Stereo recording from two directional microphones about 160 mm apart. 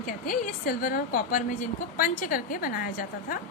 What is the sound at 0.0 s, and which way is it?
A woman's voice, 60° left (ahead or behind).